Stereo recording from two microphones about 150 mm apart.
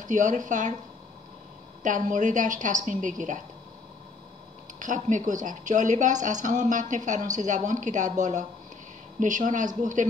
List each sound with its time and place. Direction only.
0.0 s a woman's voice: 55° right (ahead or behind)
1.8 s a woman's voice: 60° right (ahead or behind)
4.7 s a woman's voice: 60° right (ahead or behind)